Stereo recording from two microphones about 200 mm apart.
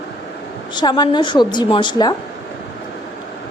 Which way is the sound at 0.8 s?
20° left (ahead or behind).